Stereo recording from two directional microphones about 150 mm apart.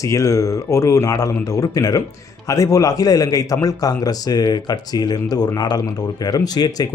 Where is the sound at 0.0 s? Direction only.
20° left (ahead or behind).